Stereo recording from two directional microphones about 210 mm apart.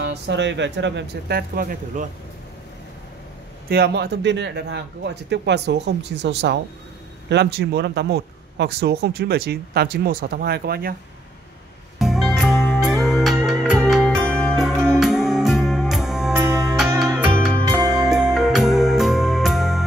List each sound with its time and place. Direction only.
0.0 s speech: 55° right (ahead or behind)
3.6 s speech: 50° right (ahead or behind)
12.0 s music: centre (ahead or behind)